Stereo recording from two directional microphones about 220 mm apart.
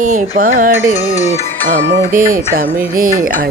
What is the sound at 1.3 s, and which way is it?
Music, 35° right (ahead or behind).